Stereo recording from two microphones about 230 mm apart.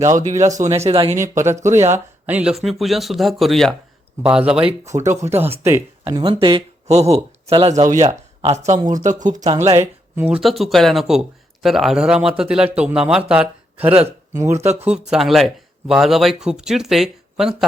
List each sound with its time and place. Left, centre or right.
0.2 s speech: right
1.5 s speech: centre; by 8.1 s right
8.1 s a sound: centre
8.5 s speech: right
10.2 s speech: centre
14.6 s speech: right
14.8 s speech: centre